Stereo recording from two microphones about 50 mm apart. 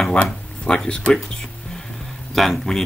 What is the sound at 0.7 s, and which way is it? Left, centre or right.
Speech, centre.